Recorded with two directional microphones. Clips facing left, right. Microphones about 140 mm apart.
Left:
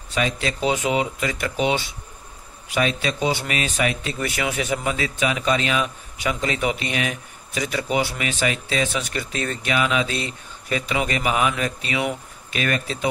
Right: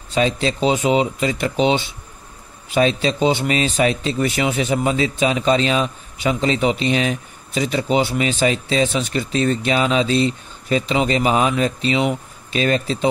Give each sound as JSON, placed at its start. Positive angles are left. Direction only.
{"t": 0.1, "sound": "a man's voice", "side_deg": -30}